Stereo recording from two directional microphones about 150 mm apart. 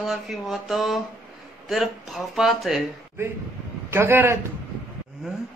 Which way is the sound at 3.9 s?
15° right (ahead or behind).